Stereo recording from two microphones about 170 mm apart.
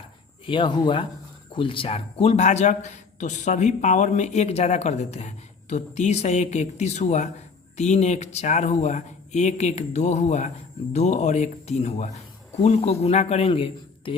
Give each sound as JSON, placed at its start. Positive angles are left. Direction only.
{"t": 0.4, "sound": "a man's voice", "side_deg": 30}